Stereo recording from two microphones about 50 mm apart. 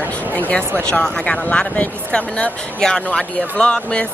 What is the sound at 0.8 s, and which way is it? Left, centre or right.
Speech, left.